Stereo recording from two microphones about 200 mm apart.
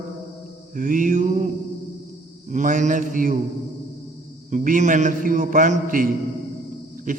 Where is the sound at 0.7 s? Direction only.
40° right (ahead or behind).